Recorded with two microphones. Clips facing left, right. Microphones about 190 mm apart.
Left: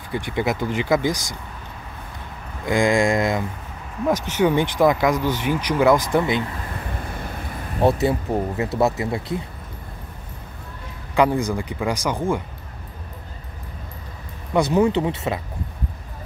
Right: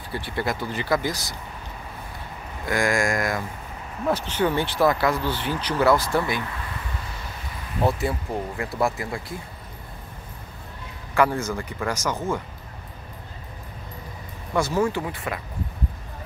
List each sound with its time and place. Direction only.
0.1 s speech: 15° left (ahead or behind)
2.6 s speech: 20° left (ahead or behind)
4.0 s speech: 10° left (ahead or behind)
6.8 s vehicle: 50° left (ahead or behind)
7.8 s speech: 20° left (ahead or behind)
11.1 s speech: 15° left (ahead or behind)
14.5 s speech: 15° left (ahead or behind)